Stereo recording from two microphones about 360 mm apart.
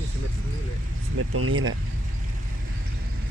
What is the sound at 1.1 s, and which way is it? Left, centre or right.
Speech, right.